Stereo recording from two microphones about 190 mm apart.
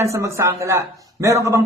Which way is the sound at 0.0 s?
15° right (ahead or behind).